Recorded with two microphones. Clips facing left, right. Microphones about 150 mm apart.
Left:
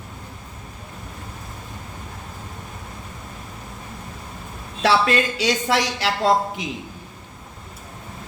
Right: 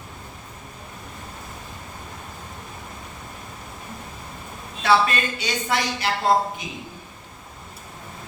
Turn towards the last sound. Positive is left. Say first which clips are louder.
# left 1 dB
turn(degrees=90)